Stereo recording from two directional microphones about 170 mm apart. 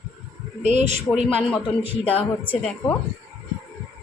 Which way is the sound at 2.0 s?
10° left (ahead or behind).